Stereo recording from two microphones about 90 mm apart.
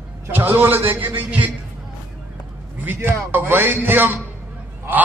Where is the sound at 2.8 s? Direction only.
20° right (ahead or behind).